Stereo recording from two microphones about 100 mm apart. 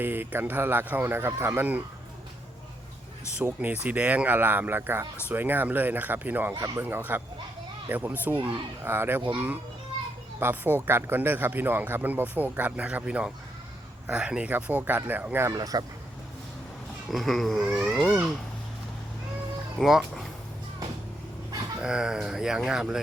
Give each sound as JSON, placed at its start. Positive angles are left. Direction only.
{"t": 0.0, "sound": "speech", "side_deg": -20}
{"t": 3.4, "sound": "speech", "side_deg": -15}
{"t": 6.5, "sound": "speech", "side_deg": -35}
{"t": 6.8, "sound": "speech", "side_deg": -20}
{"t": 10.4, "sound": "speech", "side_deg": -20}
{"t": 15.5, "sound": "speech", "side_deg": -40}
{"t": 17.1, "sound": "speech", "side_deg": 0}
{"t": 19.8, "sound": "speech", "side_deg": 0}
{"t": 21.8, "sound": "speech", "side_deg": -10}